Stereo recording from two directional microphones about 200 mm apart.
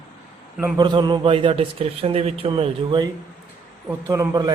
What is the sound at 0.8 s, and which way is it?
Speech, 20° right (ahead or behind).